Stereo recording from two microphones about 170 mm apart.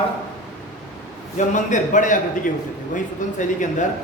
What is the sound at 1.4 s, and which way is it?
A man's voice, 45° left (ahead or behind).